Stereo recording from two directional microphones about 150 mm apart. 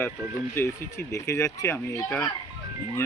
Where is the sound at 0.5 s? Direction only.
20° left (ahead or behind).